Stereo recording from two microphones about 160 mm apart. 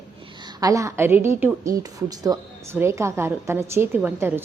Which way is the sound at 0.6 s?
20° right (ahead or behind).